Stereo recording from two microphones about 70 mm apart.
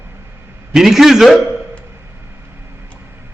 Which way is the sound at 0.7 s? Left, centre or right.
Centre.